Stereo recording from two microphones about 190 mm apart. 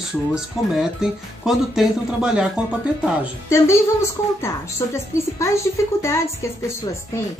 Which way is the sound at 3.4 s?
15° left (ahead or behind).